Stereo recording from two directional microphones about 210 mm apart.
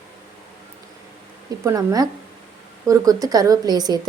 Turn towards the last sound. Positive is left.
turn(degrees=-20)  # may be behind; listen again after turning